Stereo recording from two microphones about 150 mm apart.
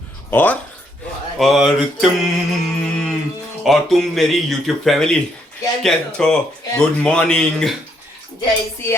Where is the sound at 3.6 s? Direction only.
Centre (ahead or behind).